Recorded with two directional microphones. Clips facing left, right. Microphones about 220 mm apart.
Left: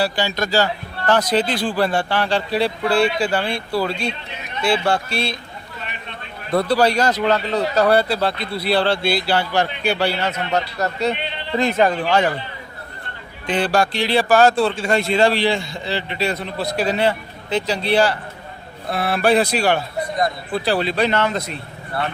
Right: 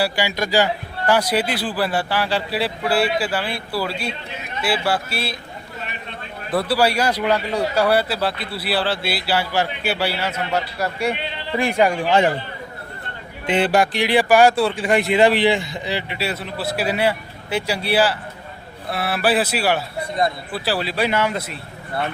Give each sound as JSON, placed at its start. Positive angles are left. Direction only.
{"t": 0.0, "sound": "a man's voice", "side_deg": -10}
{"t": 6.5, "sound": "speech", "side_deg": -5}
{"t": 13.5, "sound": "a man's voice", "side_deg": -20}